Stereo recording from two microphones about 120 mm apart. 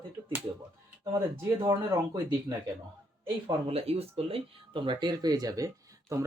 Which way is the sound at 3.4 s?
55° right (ahead or behind).